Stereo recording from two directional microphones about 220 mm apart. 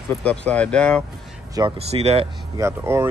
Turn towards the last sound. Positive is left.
turn(degrees=-10)  # may be behind; listen again after turning